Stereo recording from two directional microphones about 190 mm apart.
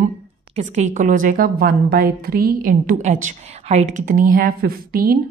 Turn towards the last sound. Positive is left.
turn(degrees=-50)  # may be behind; listen again after turning